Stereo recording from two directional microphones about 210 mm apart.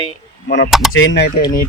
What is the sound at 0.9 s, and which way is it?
Speech, 65° left (ahead or behind).